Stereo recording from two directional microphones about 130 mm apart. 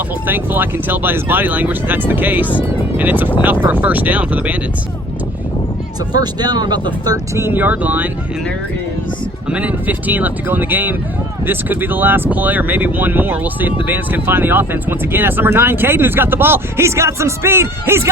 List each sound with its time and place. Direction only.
0.3 s speech: 15° right (ahead or behind)
6.1 s speech: 30° right (ahead or behind); by 8.1 s 15° right (ahead or behind)
9.5 s speech: 10° right (ahead or behind)